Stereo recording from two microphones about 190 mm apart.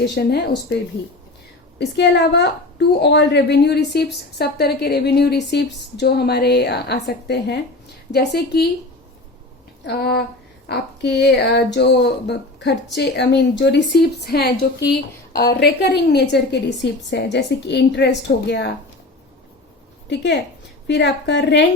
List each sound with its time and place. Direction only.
0.0 s a woman's voice: 60° left (ahead or behind)
1.8 s a woman's voice: 65° left (ahead or behind)
9.8 s a woman's voice: 60° left (ahead or behind)
15.3 s a woman's voice: 20° left (ahead or behind)
15.6 s a woman's voice: 60° left (ahead or behind)
20.8 s a woman's voice: 65° left (ahead or behind)